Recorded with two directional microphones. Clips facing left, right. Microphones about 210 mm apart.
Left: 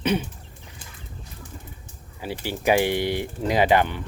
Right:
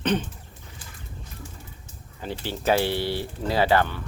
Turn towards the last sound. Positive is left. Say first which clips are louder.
# left 2 dB
turn(degrees=15)  # may be behind; listen again after turning